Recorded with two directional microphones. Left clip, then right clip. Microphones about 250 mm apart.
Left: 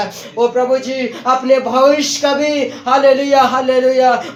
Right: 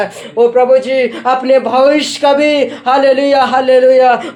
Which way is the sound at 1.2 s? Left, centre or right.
Right.